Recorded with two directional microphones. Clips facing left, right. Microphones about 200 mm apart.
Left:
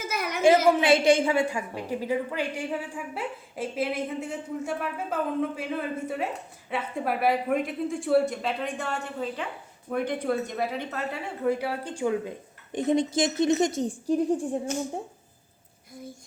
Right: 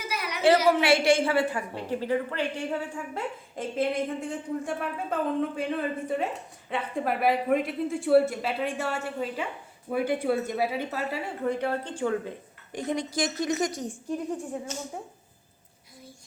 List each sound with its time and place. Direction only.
0.0 s a sound: 45° left (ahead or behind)
0.8 s a woman's voice: 20° left (ahead or behind)
12.7 s a woman's voice: 25° left (ahead or behind)